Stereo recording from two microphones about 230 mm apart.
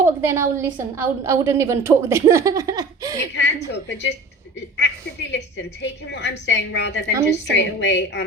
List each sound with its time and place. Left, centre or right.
0.0 s a woman's voice: centre
3.3 s a woman's voice: left
5.3 s a woman's voice: left